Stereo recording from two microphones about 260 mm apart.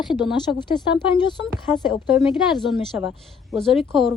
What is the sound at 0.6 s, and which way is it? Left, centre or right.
Speech, centre.